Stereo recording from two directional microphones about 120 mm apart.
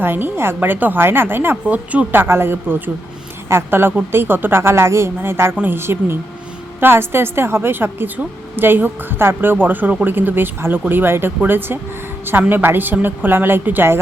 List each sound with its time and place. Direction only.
0.0 s a woman's voice: 15° right (ahead or behind)